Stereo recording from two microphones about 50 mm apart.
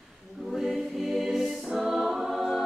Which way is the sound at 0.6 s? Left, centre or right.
Centre.